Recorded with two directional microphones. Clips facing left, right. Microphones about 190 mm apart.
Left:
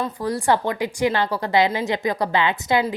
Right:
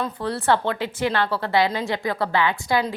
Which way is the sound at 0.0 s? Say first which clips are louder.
Left 2 dB; 10° left (ahead or behind).